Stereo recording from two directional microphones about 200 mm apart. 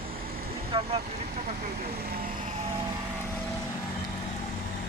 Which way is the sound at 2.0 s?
50° right (ahead or behind).